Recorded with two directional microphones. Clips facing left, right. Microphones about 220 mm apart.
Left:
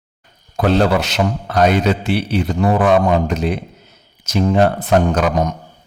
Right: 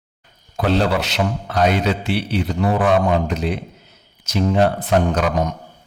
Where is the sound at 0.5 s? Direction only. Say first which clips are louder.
Left 4 dB; 45° left (ahead or behind).